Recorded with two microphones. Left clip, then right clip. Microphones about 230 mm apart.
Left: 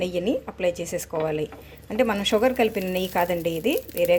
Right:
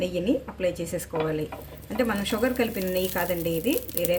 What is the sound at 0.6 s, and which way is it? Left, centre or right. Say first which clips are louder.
Speech: left 2 dB; left.